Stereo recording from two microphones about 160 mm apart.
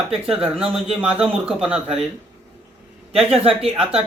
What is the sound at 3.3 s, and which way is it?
Speech, 35° right (ahead or behind).